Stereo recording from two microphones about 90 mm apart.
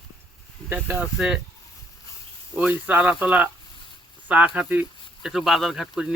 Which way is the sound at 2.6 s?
15° right (ahead or behind).